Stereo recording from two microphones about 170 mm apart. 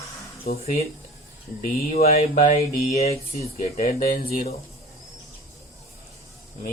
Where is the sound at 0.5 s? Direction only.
60° left (ahead or behind).